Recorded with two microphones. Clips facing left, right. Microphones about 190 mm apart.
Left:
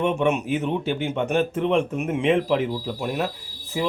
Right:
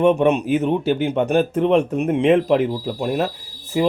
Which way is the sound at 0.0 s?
35° right (ahead or behind).